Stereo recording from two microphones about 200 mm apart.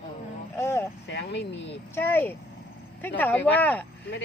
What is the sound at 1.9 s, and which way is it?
Speech, 10° left (ahead or behind).